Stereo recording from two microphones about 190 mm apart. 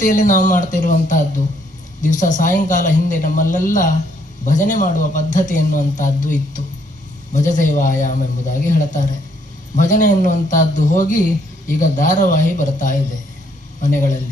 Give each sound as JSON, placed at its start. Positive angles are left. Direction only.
{"t": 0.0, "sound": "speech", "side_deg": 40}